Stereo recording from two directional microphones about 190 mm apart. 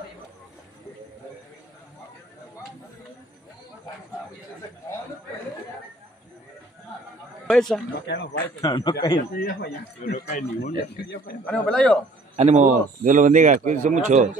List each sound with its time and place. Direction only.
7.4 s speech: centre (ahead or behind)
8.1 s speech: 70° left (ahead or behind)
8.5 s a man's voice: 20° left (ahead or behind)
9.3 s speech: 55° left (ahead or behind)
11.4 s speech: 5° left (ahead or behind)
12.4 s speech: 35° right (ahead or behind)